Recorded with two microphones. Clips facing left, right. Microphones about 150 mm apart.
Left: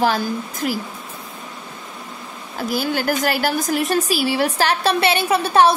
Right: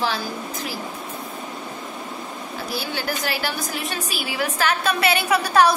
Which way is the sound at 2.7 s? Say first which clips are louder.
Left 7 dB; 45° left (ahead or behind).